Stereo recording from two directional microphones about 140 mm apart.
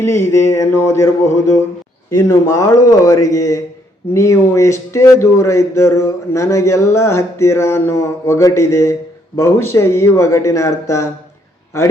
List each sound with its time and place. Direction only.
0.0 s speech: 20° left (ahead or behind)